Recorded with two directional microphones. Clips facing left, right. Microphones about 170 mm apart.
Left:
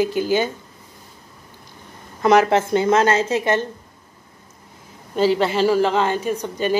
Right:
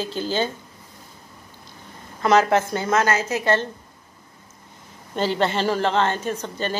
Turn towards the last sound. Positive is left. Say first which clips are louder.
# left 5 dB
turn(degrees=10)  # may be behind; listen again after turning